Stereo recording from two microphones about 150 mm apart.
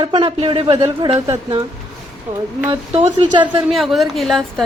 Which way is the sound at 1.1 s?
20° right (ahead or behind).